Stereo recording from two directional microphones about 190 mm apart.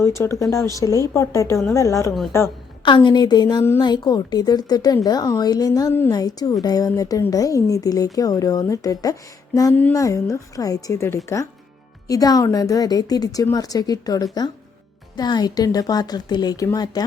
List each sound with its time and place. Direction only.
0.0 s a woman's voice: 15° left (ahead or behind)